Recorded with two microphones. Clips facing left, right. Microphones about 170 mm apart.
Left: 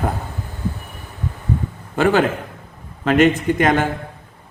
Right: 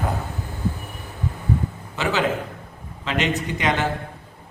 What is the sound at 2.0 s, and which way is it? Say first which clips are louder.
Speech: left 6 dB; 50° left (ahead or behind).